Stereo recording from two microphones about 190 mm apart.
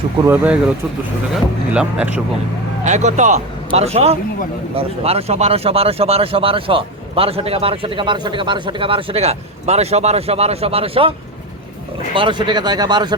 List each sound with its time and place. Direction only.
0.3 s speech: 5° right (ahead or behind)
1.7 s speech: 5° right (ahead or behind)
2.8 s speech: 40° right (ahead or behind)
12.1 s speech: 25° right (ahead or behind)